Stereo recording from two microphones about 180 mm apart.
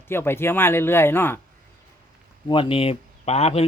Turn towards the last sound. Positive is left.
turn(degrees=35)  # may be behind; listen again after turning